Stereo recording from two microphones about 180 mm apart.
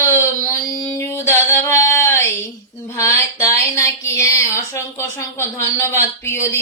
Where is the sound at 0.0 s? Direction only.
15° left (ahead or behind).